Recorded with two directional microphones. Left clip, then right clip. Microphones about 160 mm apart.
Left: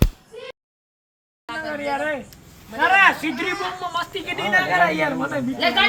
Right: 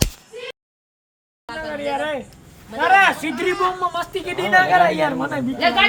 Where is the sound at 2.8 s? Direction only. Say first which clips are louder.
Right 1 dB; 90° right; by 5.4 s 65° right (ahead or behind).